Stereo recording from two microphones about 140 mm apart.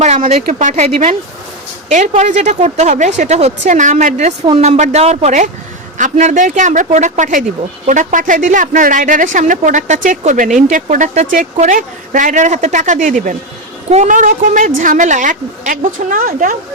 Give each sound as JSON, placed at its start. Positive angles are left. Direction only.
{"t": 0.0, "sound": "speech", "side_deg": -55}
{"t": 4.4, "sound": "a woman's voice", "side_deg": -45}